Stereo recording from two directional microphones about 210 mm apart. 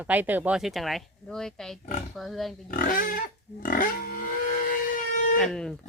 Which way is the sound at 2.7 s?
40° left (ahead or behind).